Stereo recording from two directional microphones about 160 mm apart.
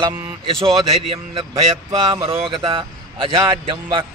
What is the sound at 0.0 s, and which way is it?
Speech, 30° right (ahead or behind).